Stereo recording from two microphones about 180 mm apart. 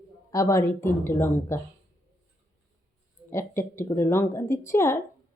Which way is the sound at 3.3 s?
15° left (ahead or behind).